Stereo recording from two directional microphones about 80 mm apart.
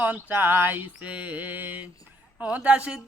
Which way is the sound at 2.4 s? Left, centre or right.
Centre.